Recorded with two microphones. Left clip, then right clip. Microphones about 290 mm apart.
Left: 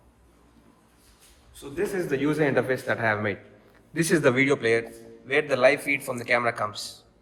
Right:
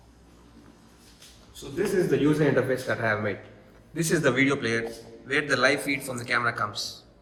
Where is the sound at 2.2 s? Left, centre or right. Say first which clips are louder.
Right 1 dB; centre.